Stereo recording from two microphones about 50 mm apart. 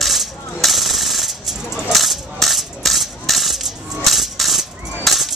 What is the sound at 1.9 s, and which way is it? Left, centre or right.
Coin, centre.